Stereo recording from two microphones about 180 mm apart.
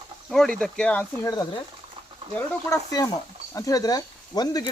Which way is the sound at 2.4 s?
20° left (ahead or behind).